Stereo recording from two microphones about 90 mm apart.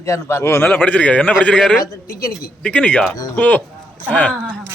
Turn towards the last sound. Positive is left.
turn(degrees=15)  # may be behind; listen again after turning